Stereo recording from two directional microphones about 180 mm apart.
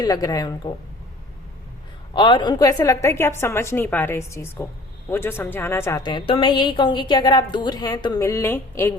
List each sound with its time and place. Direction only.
0.0 s a woman's voice: 20° left (ahead or behind)
2.1 s a woman's voice: 25° left (ahead or behind)
6.0 s a woman's voice: 25° left (ahead or behind)